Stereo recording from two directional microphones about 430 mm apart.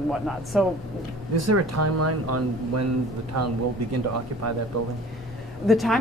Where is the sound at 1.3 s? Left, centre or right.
Right.